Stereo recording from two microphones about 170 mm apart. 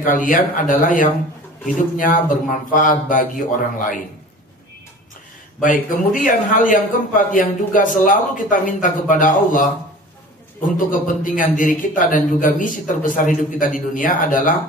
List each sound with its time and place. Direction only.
0.0 s a man's voice: 50° left (ahead or behind)
5.6 s a man's voice: 50° left (ahead or behind)